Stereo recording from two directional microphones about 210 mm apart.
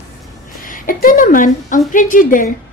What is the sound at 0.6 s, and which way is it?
A woman's voice, 40° left (ahead or behind).